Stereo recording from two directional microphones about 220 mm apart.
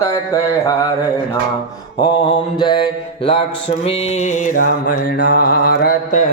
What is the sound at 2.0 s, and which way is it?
Mantra, 20° left (ahead or behind).